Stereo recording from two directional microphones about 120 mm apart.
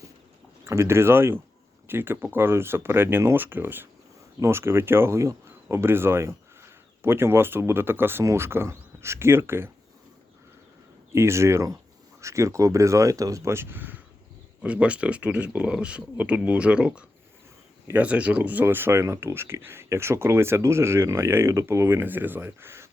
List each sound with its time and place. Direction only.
0.6 s speech: 20° right (ahead or behind)
11.1 s speech: 20° right (ahead or behind)